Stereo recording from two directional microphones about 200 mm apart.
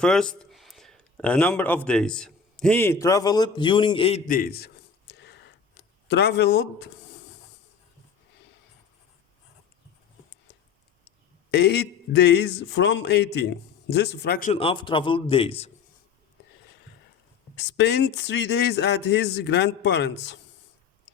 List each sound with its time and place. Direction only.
0.0 s speech: 5° left (ahead or behind); by 4.2 s 25° left (ahead or behind)
4.3 s a sound: 45° left (ahead or behind)
11.5 s a man's voice: 55° left (ahead or behind)
14.5 s a man's voice: 25° left (ahead or behind)
17.6 s a man's voice: 60° left (ahead or behind)